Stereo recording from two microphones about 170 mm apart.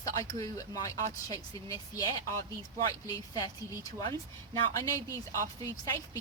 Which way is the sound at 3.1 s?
20° left (ahead or behind).